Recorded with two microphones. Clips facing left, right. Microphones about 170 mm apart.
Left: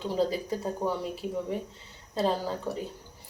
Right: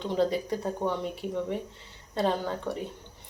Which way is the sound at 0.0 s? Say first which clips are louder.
Right 1 dB; 5° left (ahead or behind).